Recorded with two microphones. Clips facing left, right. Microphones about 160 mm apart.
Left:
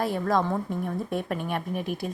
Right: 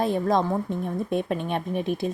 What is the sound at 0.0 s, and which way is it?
Speech, 20° right (ahead or behind).